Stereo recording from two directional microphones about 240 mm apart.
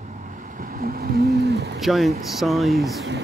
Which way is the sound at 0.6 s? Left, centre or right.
Right.